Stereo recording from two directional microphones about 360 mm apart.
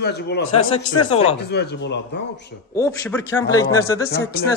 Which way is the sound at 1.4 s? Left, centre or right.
Left.